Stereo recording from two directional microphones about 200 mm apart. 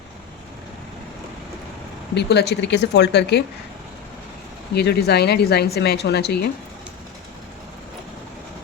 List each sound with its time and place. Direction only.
2.1 s a woman's voice: 55° left (ahead or behind)
4.7 s a woman's voice: 55° left (ahead or behind)